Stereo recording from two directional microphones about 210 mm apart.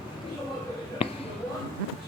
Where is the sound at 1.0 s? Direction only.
25° left (ahead or behind).